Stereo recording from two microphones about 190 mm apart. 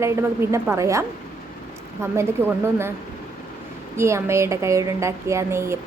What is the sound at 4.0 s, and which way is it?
A woman's voice, 15° right (ahead or behind).